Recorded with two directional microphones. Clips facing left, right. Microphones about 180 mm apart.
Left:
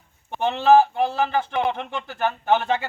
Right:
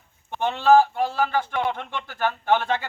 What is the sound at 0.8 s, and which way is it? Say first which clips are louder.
Speech: left 1 dB; 20° left (ahead or behind).